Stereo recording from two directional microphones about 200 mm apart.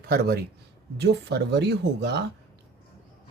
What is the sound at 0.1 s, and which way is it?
Speech, 50° right (ahead or behind).